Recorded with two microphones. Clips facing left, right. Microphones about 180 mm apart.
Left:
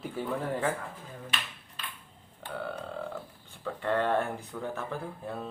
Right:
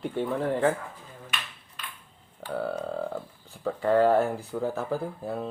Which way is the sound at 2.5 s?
40° right (ahead or behind).